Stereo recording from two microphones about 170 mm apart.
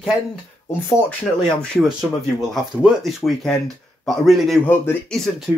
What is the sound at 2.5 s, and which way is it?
Speech, centre (ahead or behind).